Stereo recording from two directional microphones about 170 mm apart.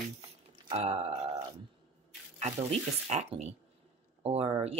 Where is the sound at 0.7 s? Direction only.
40° right (ahead or behind).